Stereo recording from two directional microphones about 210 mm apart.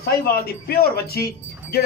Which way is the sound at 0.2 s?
45° left (ahead or behind).